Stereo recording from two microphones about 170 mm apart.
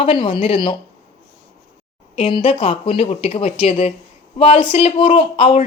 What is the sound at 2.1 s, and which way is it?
Speech, 30° left (ahead or behind).